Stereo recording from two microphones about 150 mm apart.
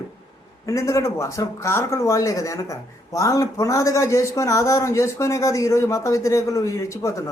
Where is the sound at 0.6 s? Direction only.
20° left (ahead or behind).